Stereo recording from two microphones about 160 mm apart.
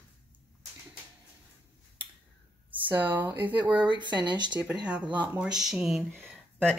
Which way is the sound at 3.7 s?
30° right (ahead or behind).